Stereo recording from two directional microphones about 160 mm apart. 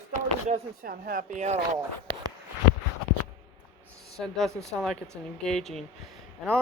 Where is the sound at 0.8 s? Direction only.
65° right (ahead or behind); by 1.6 s 45° right (ahead or behind).